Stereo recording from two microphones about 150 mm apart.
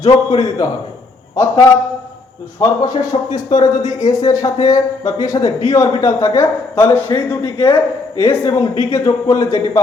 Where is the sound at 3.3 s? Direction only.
25° left (ahead or behind).